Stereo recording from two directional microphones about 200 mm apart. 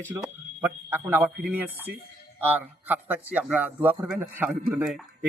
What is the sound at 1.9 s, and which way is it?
Speech, 55° right (ahead or behind).